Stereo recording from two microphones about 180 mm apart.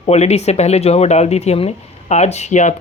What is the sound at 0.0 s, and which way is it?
Speech, 35° left (ahead or behind).